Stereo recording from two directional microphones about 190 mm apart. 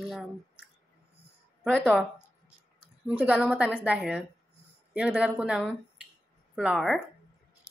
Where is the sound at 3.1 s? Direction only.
5° right (ahead or behind).